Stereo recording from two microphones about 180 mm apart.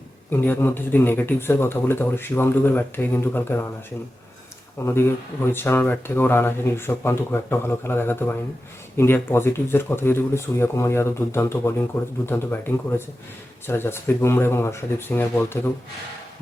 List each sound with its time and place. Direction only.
0.3 s speech: 10° left (ahead or behind)
4.8 s speech: 15° left (ahead or behind)